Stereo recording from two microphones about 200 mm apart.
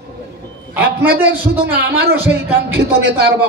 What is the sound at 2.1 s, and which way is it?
Speech, 10° right (ahead or behind).